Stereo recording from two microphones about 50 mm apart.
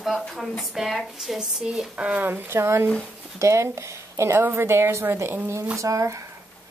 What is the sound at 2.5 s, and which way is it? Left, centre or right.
Speech, right.